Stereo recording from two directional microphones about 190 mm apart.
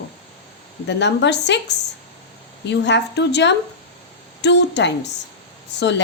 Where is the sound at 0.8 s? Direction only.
65° left (ahead or behind).